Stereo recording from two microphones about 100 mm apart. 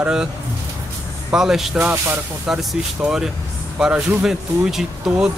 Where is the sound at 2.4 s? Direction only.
10° right (ahead or behind).